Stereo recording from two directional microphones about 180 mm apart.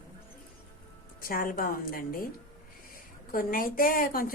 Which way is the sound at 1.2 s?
55° left (ahead or behind).